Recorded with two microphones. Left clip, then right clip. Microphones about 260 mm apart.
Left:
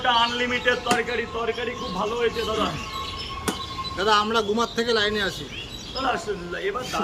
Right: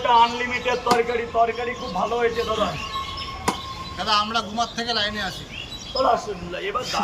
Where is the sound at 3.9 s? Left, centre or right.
Centre.